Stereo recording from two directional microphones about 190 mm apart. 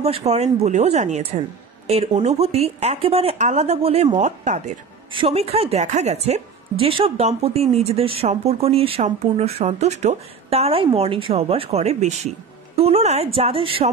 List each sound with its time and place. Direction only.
0.0 s a woman's voice: 35° right (ahead or behind)
5.1 s a woman's voice: 30° right (ahead or behind)